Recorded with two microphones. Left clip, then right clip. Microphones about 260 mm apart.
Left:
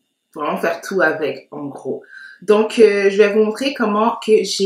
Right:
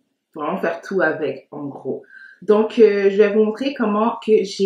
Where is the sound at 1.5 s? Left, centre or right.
Right.